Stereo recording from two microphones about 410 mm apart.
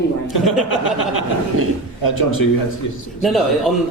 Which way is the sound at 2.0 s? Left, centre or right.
Left.